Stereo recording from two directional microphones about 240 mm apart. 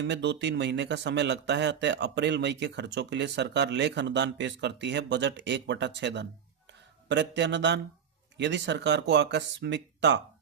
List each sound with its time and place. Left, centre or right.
0.0 s speech: right